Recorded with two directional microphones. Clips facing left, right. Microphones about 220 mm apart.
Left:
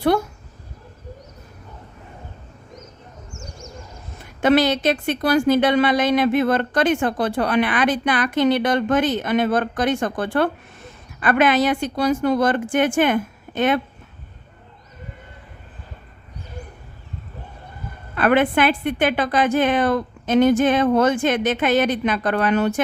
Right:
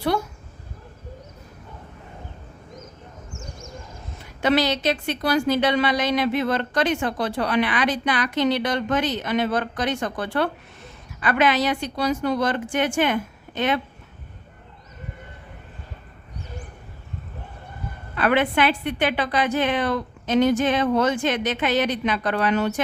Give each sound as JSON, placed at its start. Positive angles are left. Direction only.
{"t": 4.4, "sound": "a woman's voice", "side_deg": 50}
{"t": 18.1, "sound": "a woman's voice", "side_deg": 50}